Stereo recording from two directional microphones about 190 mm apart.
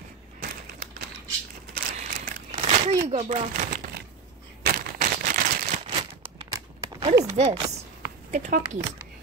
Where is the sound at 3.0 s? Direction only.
35° right (ahead or behind).